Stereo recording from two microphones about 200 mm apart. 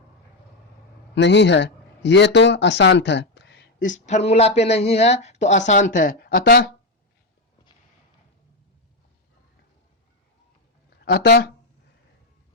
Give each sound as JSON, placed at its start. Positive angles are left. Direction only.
{"t": 1.1, "sound": "speech", "side_deg": 60}
{"t": 3.8, "sound": "speech", "side_deg": 40}
{"t": 11.0, "sound": "speech", "side_deg": 55}